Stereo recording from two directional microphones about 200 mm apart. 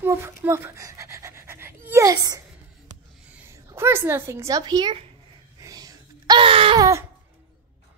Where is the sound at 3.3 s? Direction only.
15° right (ahead or behind).